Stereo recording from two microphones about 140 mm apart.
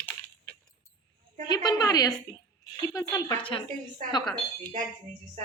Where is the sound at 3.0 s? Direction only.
25° left (ahead or behind).